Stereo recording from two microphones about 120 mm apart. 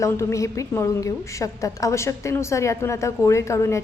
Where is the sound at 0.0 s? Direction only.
25° left (ahead or behind).